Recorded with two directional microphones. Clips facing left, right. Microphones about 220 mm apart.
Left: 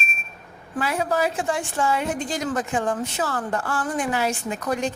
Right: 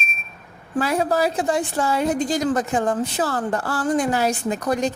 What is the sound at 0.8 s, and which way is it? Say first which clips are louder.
A woman's voice: right 3 dB; 40° right (ahead or behind).